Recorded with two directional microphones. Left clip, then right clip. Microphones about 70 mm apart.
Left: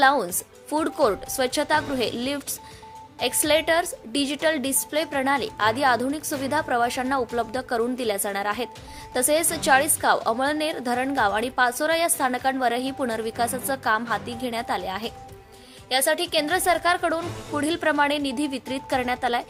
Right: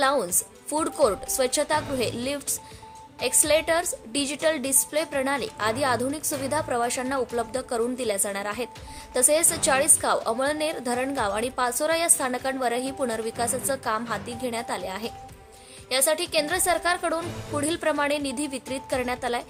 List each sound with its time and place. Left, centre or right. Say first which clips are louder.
0.0 s a woman's voice: left 4 dB; left
15.9 s a woman's voice: left 2 dB; left